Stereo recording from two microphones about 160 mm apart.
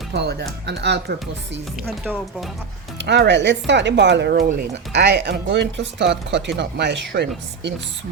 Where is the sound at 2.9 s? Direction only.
90° right.